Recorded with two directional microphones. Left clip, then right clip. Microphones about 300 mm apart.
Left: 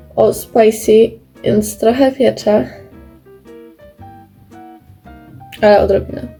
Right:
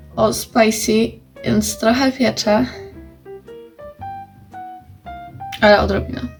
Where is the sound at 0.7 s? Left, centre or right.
Right.